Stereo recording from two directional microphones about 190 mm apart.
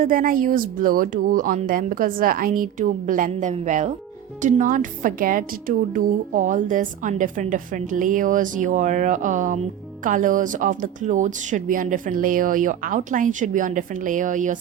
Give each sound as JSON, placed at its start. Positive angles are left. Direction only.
{"t": 0.0, "sound": "a woman's voice", "side_deg": -45}